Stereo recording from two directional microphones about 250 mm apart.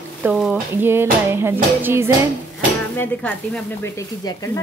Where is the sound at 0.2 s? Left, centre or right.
Centre.